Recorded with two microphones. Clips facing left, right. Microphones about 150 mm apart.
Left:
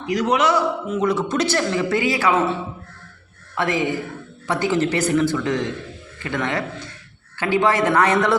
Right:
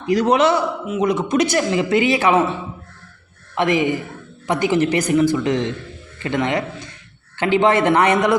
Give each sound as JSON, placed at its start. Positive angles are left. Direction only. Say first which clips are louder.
{"t": 0.0, "sound": "a man's voice", "louder": "right 4 dB", "side_deg": -30}
{"t": 3.5, "sound": "a man's voice", "louder": "right 4 dB", "side_deg": -20}